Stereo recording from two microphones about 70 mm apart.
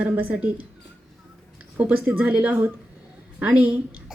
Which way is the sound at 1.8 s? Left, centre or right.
Right.